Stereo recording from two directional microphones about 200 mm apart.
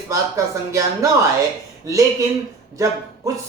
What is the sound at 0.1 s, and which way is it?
Speech, 15° right (ahead or behind).